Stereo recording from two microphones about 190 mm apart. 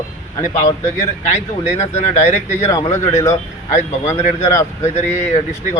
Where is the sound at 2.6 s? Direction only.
20° left (ahead or behind).